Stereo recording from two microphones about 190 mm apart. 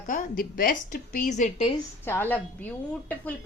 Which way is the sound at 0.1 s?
45° left (ahead or behind).